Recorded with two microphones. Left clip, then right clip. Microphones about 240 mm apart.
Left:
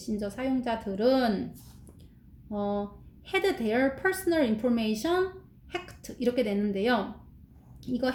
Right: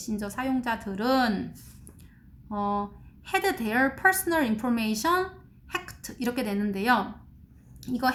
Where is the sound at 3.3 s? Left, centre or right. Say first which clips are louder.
Right 1 dB; right.